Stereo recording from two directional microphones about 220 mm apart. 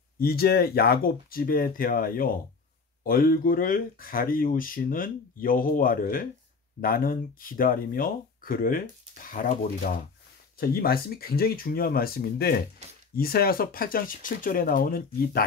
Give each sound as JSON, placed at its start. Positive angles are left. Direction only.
{"t": 0.2, "sound": "speech", "side_deg": 45}